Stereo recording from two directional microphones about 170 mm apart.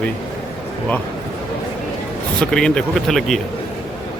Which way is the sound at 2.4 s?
5° left (ahead or behind).